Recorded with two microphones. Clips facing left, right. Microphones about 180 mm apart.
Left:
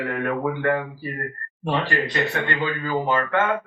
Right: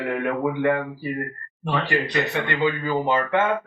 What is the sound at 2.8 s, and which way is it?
Speech, 15° right (ahead or behind).